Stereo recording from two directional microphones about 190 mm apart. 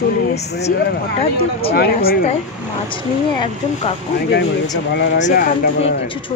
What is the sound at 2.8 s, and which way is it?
A woman's voice, 25° left (ahead or behind).